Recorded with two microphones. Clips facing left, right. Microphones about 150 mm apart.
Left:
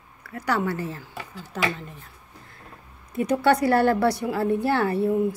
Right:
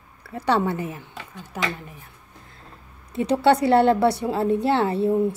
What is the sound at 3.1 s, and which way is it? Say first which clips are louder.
A woman's voice: right 2 dB; 25° right (ahead or behind).